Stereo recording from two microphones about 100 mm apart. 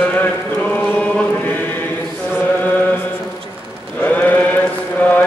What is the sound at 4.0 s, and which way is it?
Sheep, 15° left (ahead or behind).